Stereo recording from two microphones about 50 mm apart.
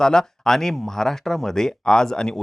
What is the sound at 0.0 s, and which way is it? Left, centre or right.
Speech, centre.